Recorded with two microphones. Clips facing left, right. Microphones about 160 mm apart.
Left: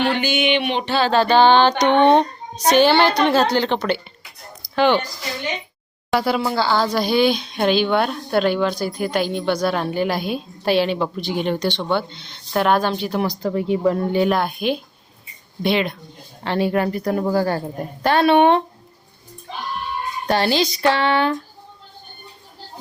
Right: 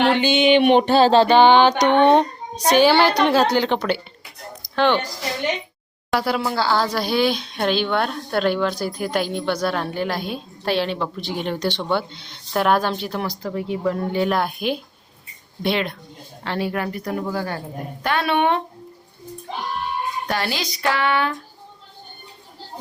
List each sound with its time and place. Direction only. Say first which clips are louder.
0.1 s a sound: right 3 dB; 25° right (ahead or behind)
0.5 s a sound: right 6 dB; 50° right (ahead or behind)
1.2 s music: right 1 dB; 15° right (ahead or behind)
4.7 s speech: left 2 dB; 5° left (ahead or behind)
6.1 s a woman's voice: left 2 dB; centre (ahead or behind)
13.1 s speech: left 5 dB; 15° left (ahead or behind)
13.5 s speech: left 4 dB; 30° left (ahead or behind)
14.3 s a woman's voice: left 2 dB; centre (ahead or behind)
16.4 s speech: left 5 dB; 25° left (ahead or behind)
20.2 s speech: left 11 dB; 30° left (ahead or behind)